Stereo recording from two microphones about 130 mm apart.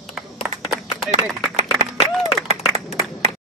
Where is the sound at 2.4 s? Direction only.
55° right (ahead or behind).